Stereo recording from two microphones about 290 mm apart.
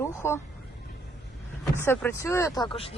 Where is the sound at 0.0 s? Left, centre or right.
Centre.